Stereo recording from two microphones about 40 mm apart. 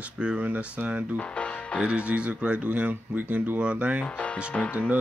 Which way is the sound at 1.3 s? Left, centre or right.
Left.